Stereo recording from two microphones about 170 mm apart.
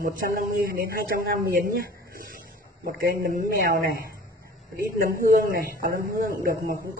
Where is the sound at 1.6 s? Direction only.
55° right (ahead or behind).